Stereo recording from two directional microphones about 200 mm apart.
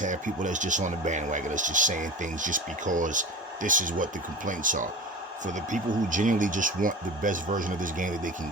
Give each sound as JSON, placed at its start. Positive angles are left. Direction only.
{"t": 0.0, "sound": "speech", "side_deg": -40}